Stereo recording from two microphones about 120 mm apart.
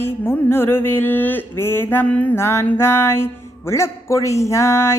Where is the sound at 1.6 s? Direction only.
20° left (ahead or behind).